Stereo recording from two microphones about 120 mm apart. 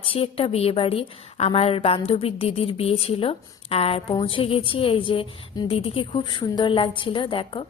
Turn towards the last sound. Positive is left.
turn(degrees=45)  # may be behind; listen again after turning